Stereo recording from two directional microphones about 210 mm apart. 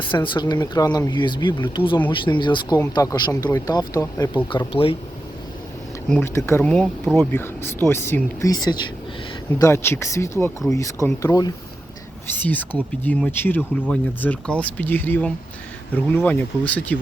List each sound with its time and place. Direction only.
0.3 s speech: 20° left (ahead or behind)
6.1 s speech: 10° left (ahead or behind)